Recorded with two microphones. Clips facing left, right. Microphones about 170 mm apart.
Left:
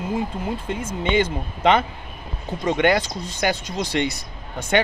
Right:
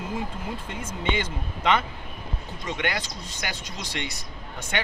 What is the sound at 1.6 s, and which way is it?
Speech, 30° left (ahead or behind).